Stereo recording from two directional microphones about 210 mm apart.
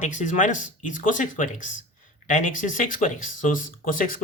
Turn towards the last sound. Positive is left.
turn(degrees=40)  # may be behind; listen again after turning